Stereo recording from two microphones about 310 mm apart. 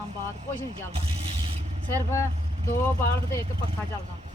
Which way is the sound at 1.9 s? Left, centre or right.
Centre.